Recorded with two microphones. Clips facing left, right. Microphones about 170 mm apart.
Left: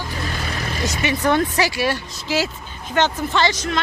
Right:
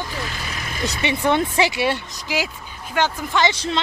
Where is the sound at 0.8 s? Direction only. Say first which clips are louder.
Even; 35° right (ahead or behind).